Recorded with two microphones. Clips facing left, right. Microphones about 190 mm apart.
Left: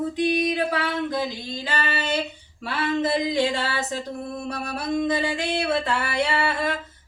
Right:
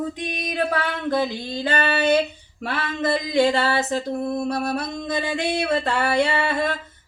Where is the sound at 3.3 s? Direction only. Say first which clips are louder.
Right 5 dB; 70° right (ahead or behind).